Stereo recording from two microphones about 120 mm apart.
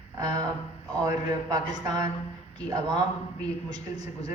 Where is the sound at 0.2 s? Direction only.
35° right (ahead or behind).